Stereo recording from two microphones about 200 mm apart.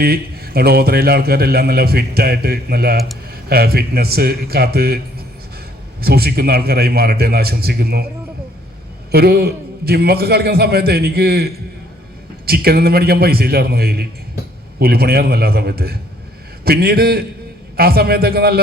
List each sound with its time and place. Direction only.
0.0 s a man's voice: 50° right (ahead or behind)
6.0 s a man's voice: 50° right (ahead or behind)
9.1 s a man's voice: 50° right (ahead or behind)